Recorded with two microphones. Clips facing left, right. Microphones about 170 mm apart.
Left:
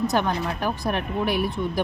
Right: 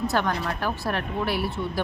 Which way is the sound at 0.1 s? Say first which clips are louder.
Left 2 dB; 15° left (ahead or behind).